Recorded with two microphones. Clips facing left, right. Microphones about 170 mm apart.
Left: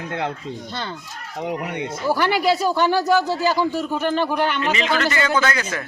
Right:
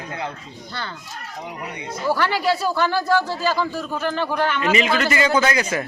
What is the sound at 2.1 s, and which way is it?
Speech, 15° left (ahead or behind).